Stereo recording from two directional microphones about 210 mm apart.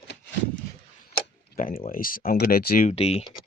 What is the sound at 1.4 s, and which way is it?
Speech, 45° left (ahead or behind).